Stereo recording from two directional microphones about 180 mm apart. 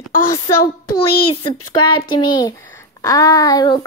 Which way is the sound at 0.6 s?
55° left (ahead or behind).